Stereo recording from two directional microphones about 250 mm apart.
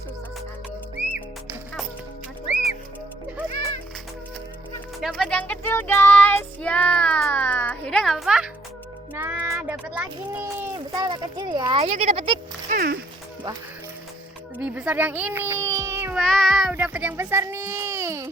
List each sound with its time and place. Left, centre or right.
4.9 s child singing: centre
9.1 s speech: centre
12.7 s speech: right
14.6 s speech: centre
16.2 s a child's voice: centre